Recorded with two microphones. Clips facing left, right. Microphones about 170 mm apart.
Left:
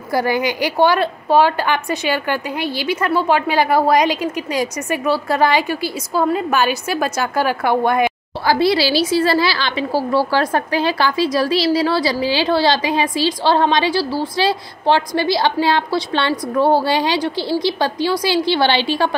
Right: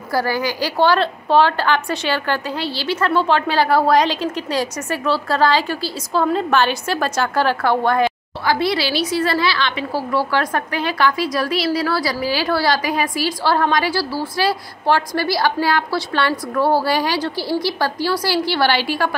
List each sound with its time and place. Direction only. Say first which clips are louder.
0.1 s a woman's voice: left 2 dB; 20° left (ahead or behind)
8.5 s a woman's voice: left 4 dB; 35° left (ahead or behind)